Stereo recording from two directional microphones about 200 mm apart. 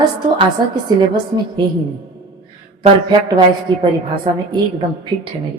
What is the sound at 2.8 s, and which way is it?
A woman's voice, 20° right (ahead or behind).